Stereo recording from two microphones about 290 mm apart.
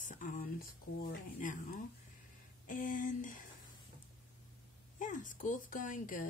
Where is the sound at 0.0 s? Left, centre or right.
Left.